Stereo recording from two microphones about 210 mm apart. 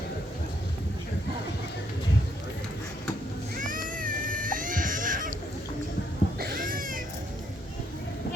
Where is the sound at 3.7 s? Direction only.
40° right (ahead or behind).